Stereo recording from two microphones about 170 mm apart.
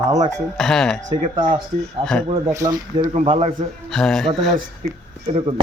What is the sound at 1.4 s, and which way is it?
Speech, 25° right (ahead or behind).